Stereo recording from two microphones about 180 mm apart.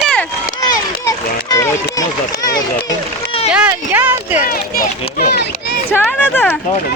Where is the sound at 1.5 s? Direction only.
15° left (ahead or behind).